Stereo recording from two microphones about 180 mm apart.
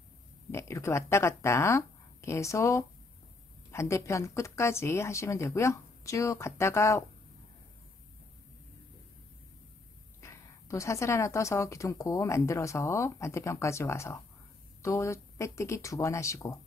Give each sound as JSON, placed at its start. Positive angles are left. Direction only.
{"t": 0.5, "sound": "a woman's voice", "side_deg": 15}
{"t": 10.2, "sound": "a woman's voice", "side_deg": 15}